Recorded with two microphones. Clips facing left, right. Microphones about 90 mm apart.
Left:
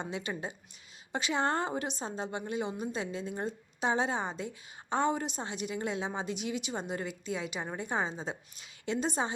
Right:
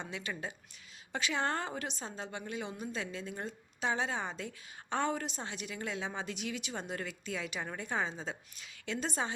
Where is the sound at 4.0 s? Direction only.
30° left (ahead or behind).